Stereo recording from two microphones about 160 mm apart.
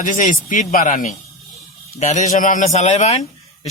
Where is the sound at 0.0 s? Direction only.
55° left (ahead or behind).